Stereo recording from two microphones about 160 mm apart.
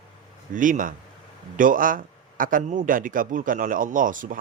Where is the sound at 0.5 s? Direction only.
55° right (ahead or behind).